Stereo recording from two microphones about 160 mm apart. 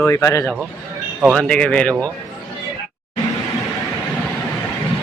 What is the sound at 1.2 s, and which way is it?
Speech, 5° left (ahead or behind).